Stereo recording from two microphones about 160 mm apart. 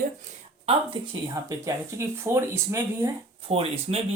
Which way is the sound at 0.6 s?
30° right (ahead or behind).